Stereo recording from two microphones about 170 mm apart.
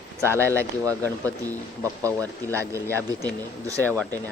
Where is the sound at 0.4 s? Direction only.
15° right (ahead or behind).